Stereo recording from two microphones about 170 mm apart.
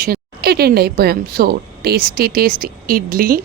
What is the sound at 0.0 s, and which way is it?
A woman's voice, 65° right (ahead or behind).